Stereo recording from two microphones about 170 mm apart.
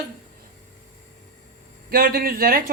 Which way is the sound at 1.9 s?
60° right (ahead or behind).